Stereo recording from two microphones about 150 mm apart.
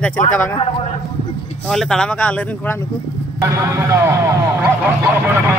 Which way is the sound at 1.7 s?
5° left (ahead or behind).